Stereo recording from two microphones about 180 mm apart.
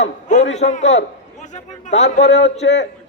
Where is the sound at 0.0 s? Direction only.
40° left (ahead or behind).